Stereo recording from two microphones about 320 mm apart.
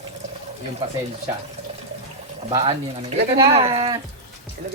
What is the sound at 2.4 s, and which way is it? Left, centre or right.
Speech, centre.